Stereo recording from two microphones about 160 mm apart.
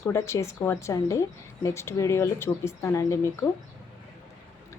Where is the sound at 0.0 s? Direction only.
20° left (ahead or behind).